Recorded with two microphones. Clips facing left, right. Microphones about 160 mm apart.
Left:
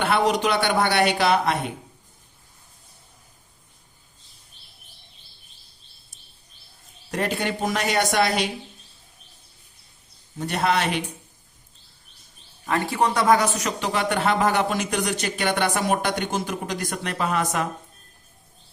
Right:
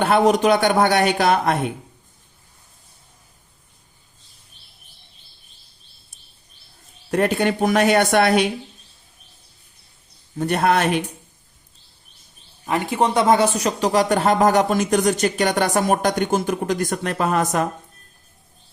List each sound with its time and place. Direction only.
0.0 s speech: 45° right (ahead or behind)
7.1 s speech: 55° right (ahead or behind)
10.3 s speech: 55° right (ahead or behind)
12.6 s speech: 15° right (ahead or behind); by 17.7 s 45° right (ahead or behind)